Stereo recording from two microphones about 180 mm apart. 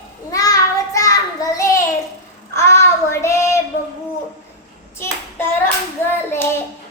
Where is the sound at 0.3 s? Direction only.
20° left (ahead or behind).